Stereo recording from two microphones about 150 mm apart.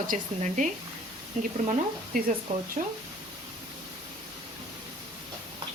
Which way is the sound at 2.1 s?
75° right (ahead or behind).